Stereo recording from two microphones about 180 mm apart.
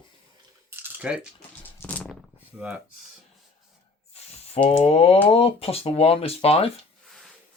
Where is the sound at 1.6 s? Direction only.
10° left (ahead or behind).